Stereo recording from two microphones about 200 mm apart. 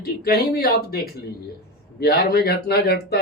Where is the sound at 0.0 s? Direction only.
50° left (ahead or behind).